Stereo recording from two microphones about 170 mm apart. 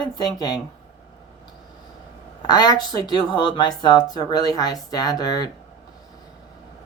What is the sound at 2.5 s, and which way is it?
Speech, 20° left (ahead or behind).